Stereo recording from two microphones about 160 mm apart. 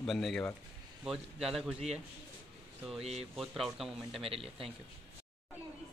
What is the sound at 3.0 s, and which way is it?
Speech, 40° right (ahead or behind).